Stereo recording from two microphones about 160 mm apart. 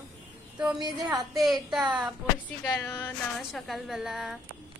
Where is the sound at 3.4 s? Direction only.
Centre (ahead or behind).